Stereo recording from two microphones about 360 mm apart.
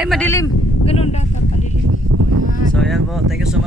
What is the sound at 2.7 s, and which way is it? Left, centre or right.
Speech, centre.